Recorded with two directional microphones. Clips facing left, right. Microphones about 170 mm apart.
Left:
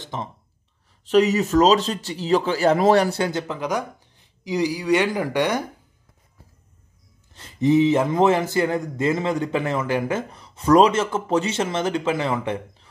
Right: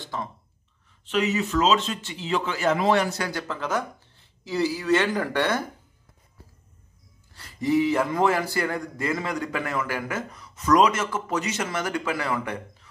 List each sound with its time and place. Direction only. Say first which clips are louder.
0.0 s speech: left 2 dB; 20° left (ahead or behind)
1.0 s a man's voice: left 7 dB; 40° left (ahead or behind); by 5.7 s 15° left (ahead or behind)
7.3 s a man's voice: left 5 dB; 20° left (ahead or behind)